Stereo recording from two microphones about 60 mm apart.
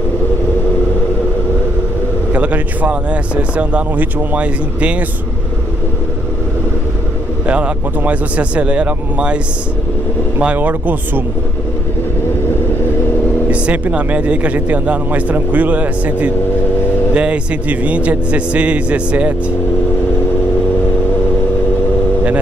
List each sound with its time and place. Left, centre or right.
2.3 s speech: right
7.4 s speech: right
10.4 s speech: right
13.5 s speech: right